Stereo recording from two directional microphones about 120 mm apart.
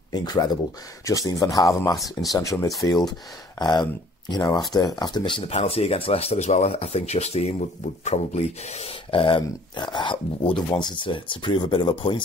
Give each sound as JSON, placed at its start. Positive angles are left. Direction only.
{"t": 0.1, "sound": "speech", "side_deg": 35}